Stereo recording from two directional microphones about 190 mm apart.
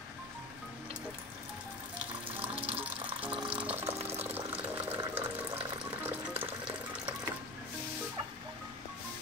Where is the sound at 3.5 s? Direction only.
5° right (ahead or behind).